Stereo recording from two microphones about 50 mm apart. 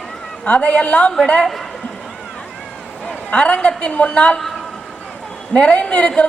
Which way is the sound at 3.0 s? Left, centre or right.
Left.